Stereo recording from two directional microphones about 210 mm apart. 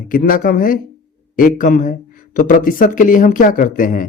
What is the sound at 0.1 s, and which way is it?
Speech, 40° left (ahead or behind).